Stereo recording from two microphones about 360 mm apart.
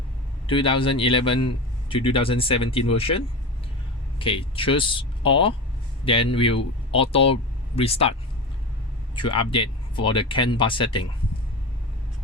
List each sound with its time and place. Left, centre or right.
0.4 s speech: centre
9.1 s speech: centre